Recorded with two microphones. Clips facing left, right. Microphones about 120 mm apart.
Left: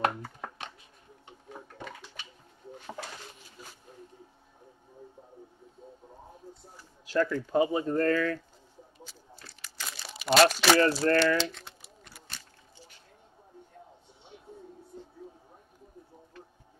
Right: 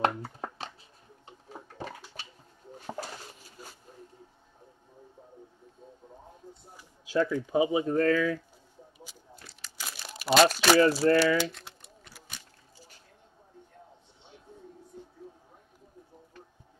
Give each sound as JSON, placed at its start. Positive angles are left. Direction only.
{"t": 0.2, "sound": "a sound", "side_deg": -30}
{"t": 1.8, "sound": "toilet flush", "side_deg": -35}
{"t": 6.8, "sound": "speech", "side_deg": -10}
{"t": 9.8, "sound": "crumpling", "side_deg": -5}